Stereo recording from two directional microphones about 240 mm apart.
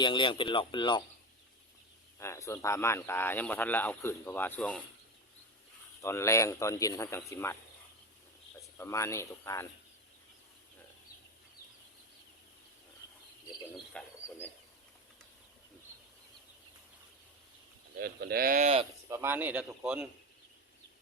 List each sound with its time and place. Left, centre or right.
0.0 s speech: centre
2.1 s speech: centre
6.0 s speech: centre
8.8 s speech: centre
14.3 s bird: centre
18.0 s speech: right
19.0 s speech: centre